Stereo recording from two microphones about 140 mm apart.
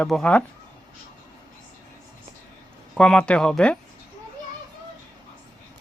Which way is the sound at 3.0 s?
5° left (ahead or behind).